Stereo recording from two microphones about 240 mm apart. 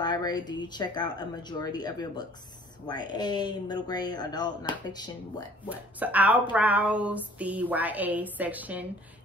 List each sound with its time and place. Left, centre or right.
0.0 s speech: centre
5.7 s a woman's voice: centre